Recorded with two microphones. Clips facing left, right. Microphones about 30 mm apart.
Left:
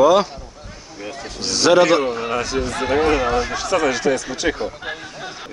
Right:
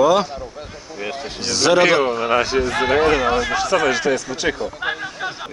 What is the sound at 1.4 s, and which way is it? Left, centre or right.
Speech, centre.